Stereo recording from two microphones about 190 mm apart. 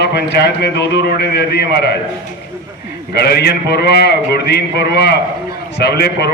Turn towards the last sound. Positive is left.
turn(degrees=60)  # may be behind; listen again after turning